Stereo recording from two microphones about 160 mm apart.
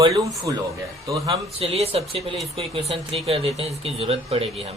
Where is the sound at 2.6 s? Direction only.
35° right (ahead or behind).